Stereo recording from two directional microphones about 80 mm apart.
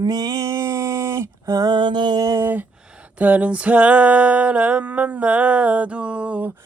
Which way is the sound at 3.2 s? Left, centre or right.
Centre.